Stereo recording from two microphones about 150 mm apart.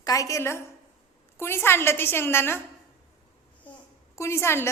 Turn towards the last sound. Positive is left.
turn(degrees=15)  # may be behind; listen again after turning